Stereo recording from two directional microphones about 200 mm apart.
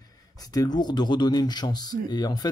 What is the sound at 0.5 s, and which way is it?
Speech, 20° left (ahead or behind).